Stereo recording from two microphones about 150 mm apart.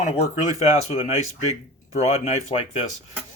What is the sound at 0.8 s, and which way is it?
Speech, 45° left (ahead or behind).